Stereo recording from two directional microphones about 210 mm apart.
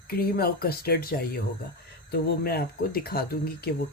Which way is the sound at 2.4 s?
45° left (ahead or behind).